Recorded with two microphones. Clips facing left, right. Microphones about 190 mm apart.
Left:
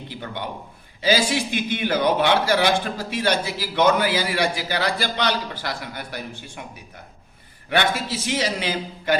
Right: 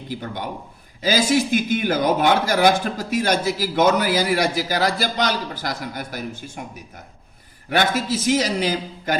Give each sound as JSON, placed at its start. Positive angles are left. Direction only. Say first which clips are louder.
{"t": 0.1, "sound": "a man's voice", "louder": "right 4 dB", "side_deg": -45}
{"t": 7.7, "sound": "a man's voice", "louder": "right 2 dB", "side_deg": -45}